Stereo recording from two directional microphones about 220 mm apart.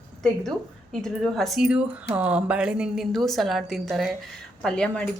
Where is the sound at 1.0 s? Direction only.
Centre (ahead or behind).